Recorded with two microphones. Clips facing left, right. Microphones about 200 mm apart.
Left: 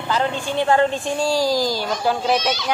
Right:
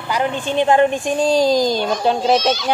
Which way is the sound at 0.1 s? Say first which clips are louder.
Right 2 dB; 15° right (ahead or behind).